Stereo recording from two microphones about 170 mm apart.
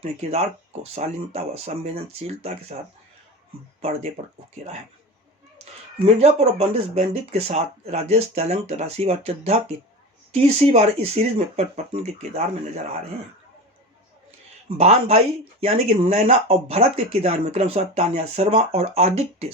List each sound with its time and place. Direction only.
0.0 s speech: 40° right (ahead or behind)
3.8 s speech: 35° right (ahead or behind)
6.1 s speech: 40° right (ahead or behind)
14.8 s speech: 40° right (ahead or behind)